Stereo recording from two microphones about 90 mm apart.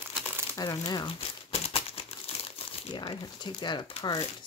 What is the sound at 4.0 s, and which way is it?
Speech, 40° left (ahead or behind).